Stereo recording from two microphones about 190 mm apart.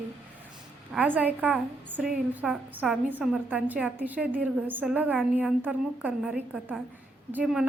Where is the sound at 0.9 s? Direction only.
10° right (ahead or behind).